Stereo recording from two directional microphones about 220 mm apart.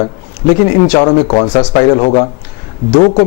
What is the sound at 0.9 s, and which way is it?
A man's voice, 25° left (ahead or behind).